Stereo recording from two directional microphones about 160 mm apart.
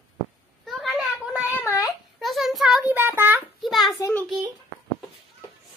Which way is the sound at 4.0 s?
20° left (ahead or behind).